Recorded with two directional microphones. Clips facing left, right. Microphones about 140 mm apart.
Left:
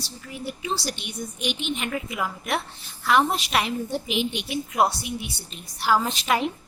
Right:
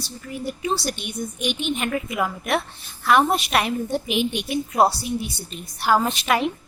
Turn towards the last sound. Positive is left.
turn(degrees=-65)  # may be behind; listen again after turning